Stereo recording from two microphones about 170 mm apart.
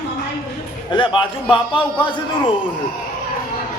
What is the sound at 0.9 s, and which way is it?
Speech, 30° left (ahead or behind).